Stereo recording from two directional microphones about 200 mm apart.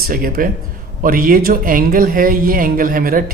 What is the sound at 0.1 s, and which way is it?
A man's voice, 45° right (ahead or behind).